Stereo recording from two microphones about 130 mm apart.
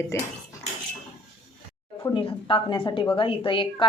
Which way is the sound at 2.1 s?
40° left (ahead or behind).